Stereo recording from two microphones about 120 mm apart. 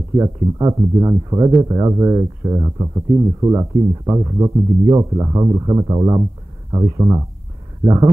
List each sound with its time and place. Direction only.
0.2 s speech: 25° right (ahead or behind)